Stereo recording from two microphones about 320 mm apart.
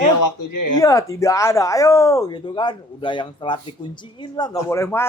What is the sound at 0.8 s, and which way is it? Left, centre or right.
Speech, centre.